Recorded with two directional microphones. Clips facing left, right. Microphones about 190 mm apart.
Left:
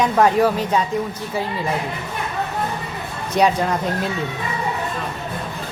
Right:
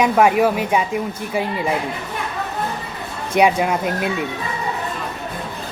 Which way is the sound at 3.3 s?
10° right (ahead or behind).